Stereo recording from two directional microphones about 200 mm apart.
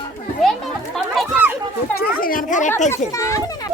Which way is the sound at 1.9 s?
50° left (ahead or behind).